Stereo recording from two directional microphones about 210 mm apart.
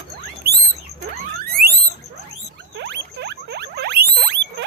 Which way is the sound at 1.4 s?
45° right (ahead or behind).